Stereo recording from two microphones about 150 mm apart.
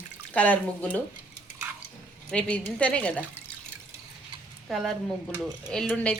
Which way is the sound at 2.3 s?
10° left (ahead or behind).